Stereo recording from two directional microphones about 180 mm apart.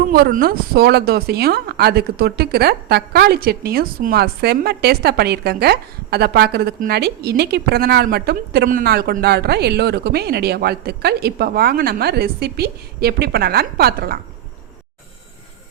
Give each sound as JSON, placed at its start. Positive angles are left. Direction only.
{"t": 0.1, "sound": "speech", "side_deg": -55}